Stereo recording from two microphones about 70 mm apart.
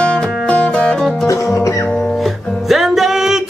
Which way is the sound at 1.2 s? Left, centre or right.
Left.